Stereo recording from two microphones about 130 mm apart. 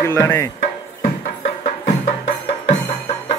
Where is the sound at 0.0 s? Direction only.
20° left (ahead or behind).